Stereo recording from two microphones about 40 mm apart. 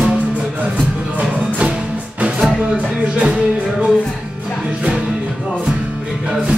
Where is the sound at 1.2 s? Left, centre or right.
Right.